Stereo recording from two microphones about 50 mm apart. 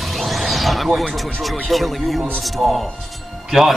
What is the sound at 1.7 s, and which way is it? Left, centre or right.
Speech, centre.